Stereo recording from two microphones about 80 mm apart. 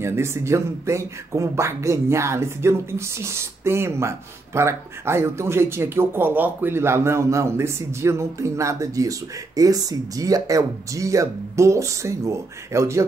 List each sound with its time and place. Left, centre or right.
0.0 s speech: right